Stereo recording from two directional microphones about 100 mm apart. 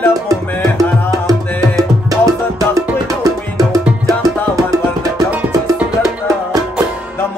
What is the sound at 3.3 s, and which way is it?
Music, 35° right (ahead or behind).